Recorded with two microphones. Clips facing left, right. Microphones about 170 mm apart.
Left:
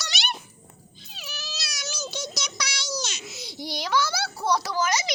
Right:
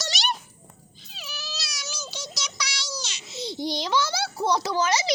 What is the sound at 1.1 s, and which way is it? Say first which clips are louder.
Child singing: right 1 dB; 45° left (ahead or behind).